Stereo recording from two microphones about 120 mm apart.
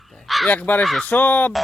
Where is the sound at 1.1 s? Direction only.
15° left (ahead or behind).